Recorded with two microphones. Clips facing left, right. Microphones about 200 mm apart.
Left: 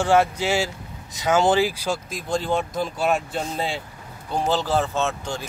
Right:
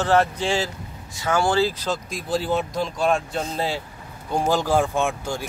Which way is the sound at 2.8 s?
5° left (ahead or behind).